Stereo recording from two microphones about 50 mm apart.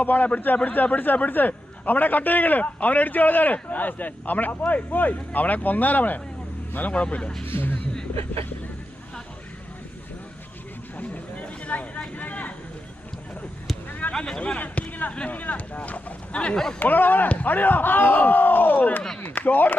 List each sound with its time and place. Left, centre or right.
0.0 s a man's voice: left
7.4 s speech: left
10.9 s a sound: left
14.1 s speech: centre
16.8 s a man's voice: left